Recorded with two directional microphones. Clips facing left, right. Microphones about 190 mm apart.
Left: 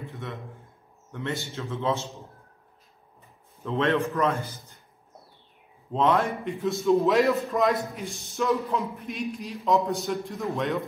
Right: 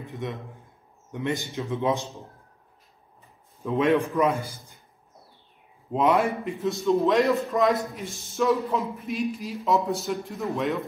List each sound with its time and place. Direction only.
0.0 s a man's voice: 15° right (ahead or behind)
3.6 s a man's voice: 15° right (ahead or behind)
5.9 s a man's voice: 10° right (ahead or behind)
6.3 s a man's voice: centre (ahead or behind)